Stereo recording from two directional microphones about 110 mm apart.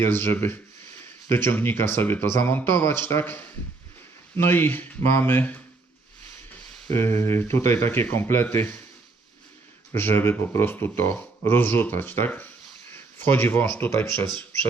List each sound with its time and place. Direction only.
0.0 s speech: 20° left (ahead or behind)
6.9 s speech: 20° left (ahead or behind)
9.9 s speech: 20° left (ahead or behind)